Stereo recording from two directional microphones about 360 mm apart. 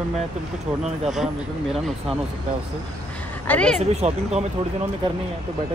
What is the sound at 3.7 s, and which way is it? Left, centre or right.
Speech, centre.